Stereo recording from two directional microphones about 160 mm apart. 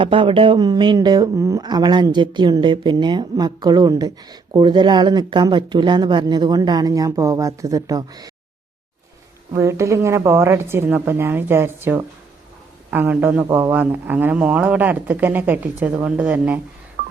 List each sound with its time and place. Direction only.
0.0 s speech: 35° right (ahead or behind)
9.5 s speech: 20° right (ahead or behind)
17.0 s telephone dialing: 75° right (ahead or behind)